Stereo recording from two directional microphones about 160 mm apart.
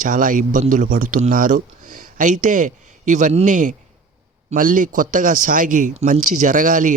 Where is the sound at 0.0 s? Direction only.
55° right (ahead or behind).